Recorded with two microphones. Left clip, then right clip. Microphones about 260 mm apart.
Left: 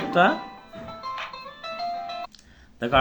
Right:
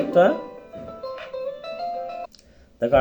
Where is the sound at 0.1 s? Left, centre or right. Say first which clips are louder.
Right 2 dB; centre.